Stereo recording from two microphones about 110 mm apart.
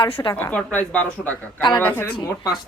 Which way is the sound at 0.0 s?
50° left (ahead or behind).